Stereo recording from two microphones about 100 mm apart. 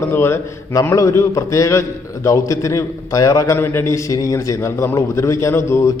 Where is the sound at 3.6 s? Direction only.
25° left (ahead or behind).